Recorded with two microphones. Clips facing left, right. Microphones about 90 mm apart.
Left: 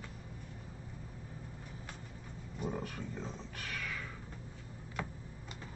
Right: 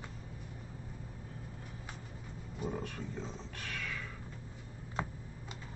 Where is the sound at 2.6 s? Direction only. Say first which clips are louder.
Even; centre (ahead or behind).